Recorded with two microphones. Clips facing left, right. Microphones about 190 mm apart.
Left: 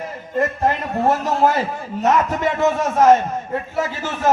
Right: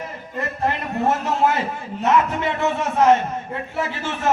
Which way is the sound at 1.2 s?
40° left (ahead or behind).